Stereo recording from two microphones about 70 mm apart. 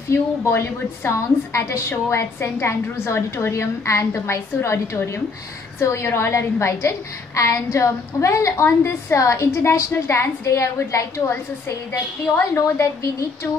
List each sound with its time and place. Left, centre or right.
0.1 s a woman's voice: left
12.4 s a woman's voice: left